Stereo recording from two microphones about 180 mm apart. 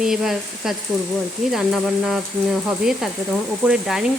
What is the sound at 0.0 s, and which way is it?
Speech, centre (ahead or behind).